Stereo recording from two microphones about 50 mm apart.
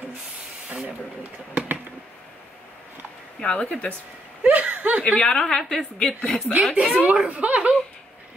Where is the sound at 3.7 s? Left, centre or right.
Left.